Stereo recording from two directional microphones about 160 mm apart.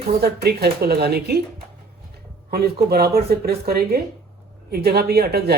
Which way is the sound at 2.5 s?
75° right (ahead or behind).